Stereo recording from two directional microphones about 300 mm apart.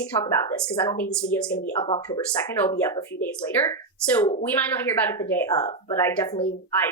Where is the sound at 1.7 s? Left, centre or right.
Centre.